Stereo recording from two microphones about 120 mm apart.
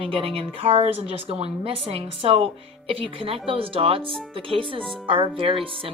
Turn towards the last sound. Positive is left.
turn(degrees=-45)  # may be behind; listen again after turning